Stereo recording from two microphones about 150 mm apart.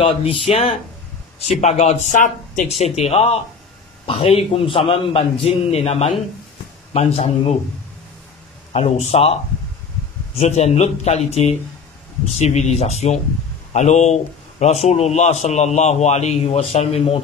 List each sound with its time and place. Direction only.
0.0 s a man's voice: 35° left (ahead or behind); by 2.7 s 60° left (ahead or behind)
2.8 s a man's voice: 40° left (ahead or behind)
8.7 s a man's voice: 45° left (ahead or behind)
10.4 s a man's voice: 45° left (ahead or behind)
12.4 s a man's voice: 50° left (ahead or behind)